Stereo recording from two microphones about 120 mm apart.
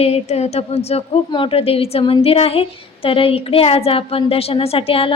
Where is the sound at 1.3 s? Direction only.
45° left (ahead or behind).